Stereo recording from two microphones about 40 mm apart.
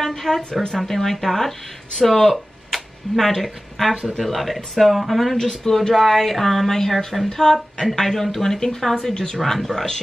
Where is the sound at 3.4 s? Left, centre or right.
Centre.